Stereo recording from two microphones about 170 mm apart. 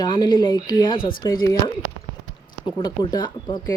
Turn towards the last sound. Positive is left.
turn(degrees=25)  # may be behind; listen again after turning